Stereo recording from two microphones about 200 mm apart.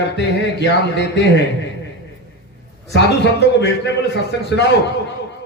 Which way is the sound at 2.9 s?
60° left (ahead or behind).